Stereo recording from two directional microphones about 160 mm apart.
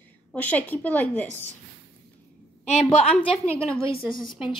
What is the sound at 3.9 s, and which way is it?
Speech, 30° left (ahead or behind).